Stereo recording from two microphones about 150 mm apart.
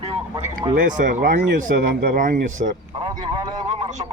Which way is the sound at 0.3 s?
25° right (ahead or behind).